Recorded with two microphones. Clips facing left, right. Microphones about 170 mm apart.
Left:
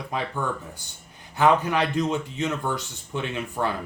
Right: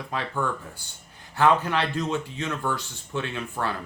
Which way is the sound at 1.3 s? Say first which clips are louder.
Left 1 dB; 15° left (ahead or behind).